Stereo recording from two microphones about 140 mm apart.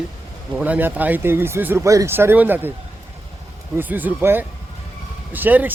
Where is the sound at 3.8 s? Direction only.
10° right (ahead or behind).